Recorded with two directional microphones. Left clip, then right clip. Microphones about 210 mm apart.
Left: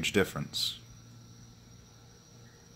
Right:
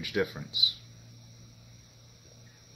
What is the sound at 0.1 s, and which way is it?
Speech, 45° left (ahead or behind).